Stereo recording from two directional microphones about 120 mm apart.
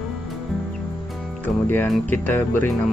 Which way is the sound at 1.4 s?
15° left (ahead or behind).